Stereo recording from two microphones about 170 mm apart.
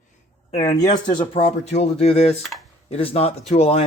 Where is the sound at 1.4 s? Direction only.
40° left (ahead or behind).